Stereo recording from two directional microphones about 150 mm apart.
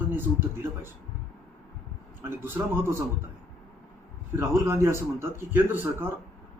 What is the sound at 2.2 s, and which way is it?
Speech, 15° right (ahead or behind).